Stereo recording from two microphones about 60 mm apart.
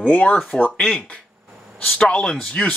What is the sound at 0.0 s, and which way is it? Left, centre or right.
Speech, left.